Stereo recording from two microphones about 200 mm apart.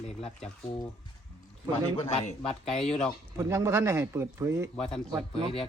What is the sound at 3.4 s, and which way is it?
Speech, 15° right (ahead or behind).